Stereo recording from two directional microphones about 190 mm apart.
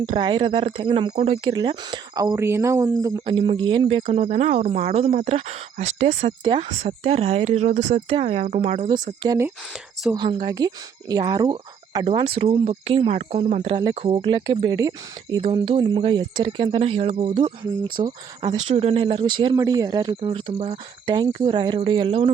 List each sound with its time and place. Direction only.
0.0 s speech: 30° right (ahead or behind)
1.5 s speech: 25° right (ahead or behind)
4.0 s speech: 40° right (ahead or behind)
6.4 s speech: 25° right (ahead or behind)
9.2 s speech: 20° right (ahead or behind)